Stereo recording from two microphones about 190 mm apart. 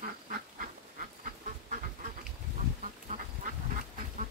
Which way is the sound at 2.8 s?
45° right (ahead or behind).